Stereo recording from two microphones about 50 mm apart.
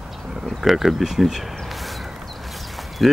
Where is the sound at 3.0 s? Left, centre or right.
Centre.